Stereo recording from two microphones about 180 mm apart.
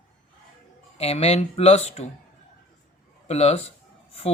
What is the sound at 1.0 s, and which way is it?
Speech, 35° left (ahead or behind).